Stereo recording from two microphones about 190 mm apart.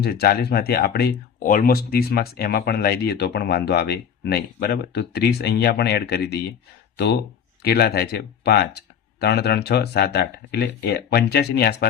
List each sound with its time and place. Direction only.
0.0 s speech: 55° left (ahead or behind)